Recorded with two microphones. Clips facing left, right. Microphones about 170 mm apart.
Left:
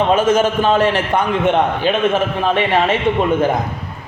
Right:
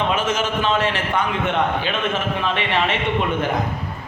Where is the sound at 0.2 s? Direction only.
50° left (ahead or behind).